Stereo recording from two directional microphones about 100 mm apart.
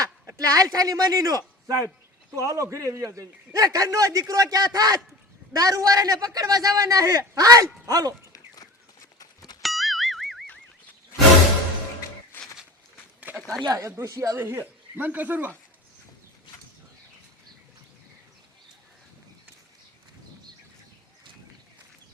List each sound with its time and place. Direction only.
0.0 s a man's voice: 40° right (ahead or behind)
8.3 s a sound: 40° left (ahead or behind)
9.6 s music: centre (ahead or behind)
12.3 s walk: 20° left (ahead or behind)
13.1 s a sound: 15° right (ahead or behind)
13.7 s a man's voice: 35° right (ahead or behind)
14.4 s speech: 20° right (ahead or behind)